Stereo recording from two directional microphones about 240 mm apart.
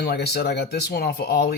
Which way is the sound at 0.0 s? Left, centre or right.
Left.